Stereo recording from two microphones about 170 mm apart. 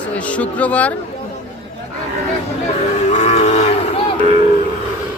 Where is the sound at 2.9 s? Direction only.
40° left (ahead or behind).